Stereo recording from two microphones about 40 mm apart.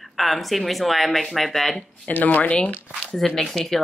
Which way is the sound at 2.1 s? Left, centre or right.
Left.